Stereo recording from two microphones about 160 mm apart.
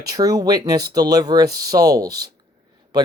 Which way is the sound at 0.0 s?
20° right (ahead or behind).